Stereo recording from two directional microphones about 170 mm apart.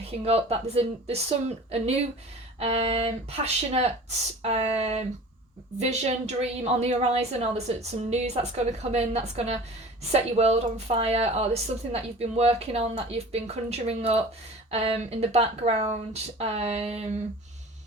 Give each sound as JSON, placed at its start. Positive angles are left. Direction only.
{"t": 0.3, "sound": "a woman's voice", "side_deg": -35}